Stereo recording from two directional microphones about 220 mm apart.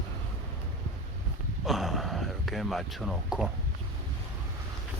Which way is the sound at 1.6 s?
Centre (ahead or behind).